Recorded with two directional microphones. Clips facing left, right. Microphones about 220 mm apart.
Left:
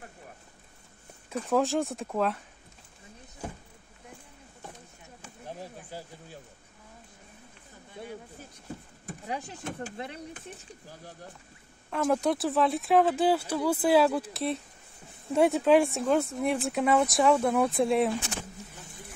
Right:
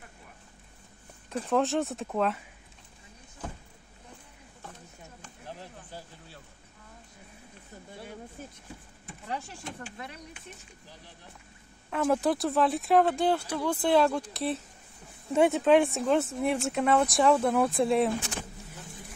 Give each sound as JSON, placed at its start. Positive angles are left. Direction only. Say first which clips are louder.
{"t": 1.5, "sound": "speech", "louder": "left 1 dB", "side_deg": 0}
{"t": 5.2, "sound": "a sound", "louder": "left 4 dB", "side_deg": 10}
{"t": 9.2, "sound": "speech", "louder": "left 1 dB", "side_deg": 15}
{"t": 9.9, "sound": "speech", "louder": "left 5 dB", "side_deg": 25}
{"t": 11.9, "sound": "speech", "louder": "even", "side_deg": 0}